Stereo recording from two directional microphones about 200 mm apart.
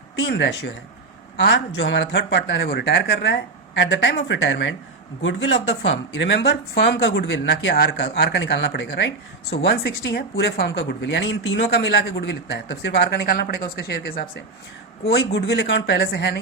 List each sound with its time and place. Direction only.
0.2 s speech: 55° left (ahead or behind)